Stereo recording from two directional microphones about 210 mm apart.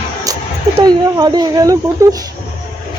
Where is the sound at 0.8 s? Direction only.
20° right (ahead or behind).